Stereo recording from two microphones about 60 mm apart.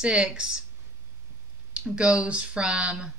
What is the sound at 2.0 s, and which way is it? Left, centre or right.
Speech, right.